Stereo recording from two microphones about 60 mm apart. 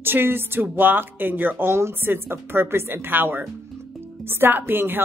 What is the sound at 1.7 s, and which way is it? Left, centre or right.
Speech, right.